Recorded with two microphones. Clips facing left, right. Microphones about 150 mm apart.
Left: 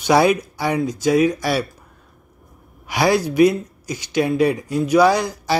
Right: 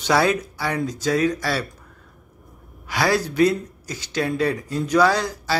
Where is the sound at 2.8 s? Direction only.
15° left (ahead or behind).